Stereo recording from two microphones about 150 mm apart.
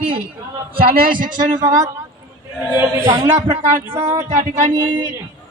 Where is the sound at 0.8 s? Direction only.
70° right (ahead or behind).